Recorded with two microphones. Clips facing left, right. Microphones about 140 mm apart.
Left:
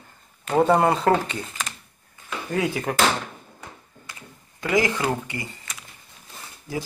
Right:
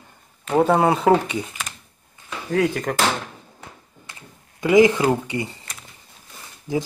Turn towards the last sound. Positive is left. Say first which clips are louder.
# right 6 dB
turn(degrees=-20)  # may be behind; listen again after turning